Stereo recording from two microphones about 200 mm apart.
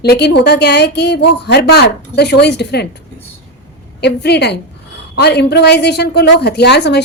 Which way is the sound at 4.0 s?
55° left (ahead or behind).